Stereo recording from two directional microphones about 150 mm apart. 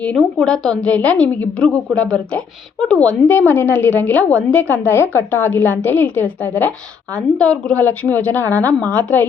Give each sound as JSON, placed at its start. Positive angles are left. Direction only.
{"t": 0.3, "sound": "a woman's voice", "side_deg": 5}